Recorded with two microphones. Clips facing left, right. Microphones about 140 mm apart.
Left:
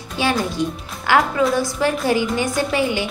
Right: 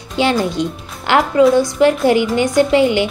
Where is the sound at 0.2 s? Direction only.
20° right (ahead or behind).